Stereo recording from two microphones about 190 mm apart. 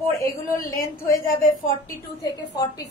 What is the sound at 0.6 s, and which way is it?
Speech, 15° left (ahead or behind).